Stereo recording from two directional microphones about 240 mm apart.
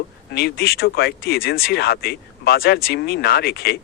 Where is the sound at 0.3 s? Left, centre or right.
Left.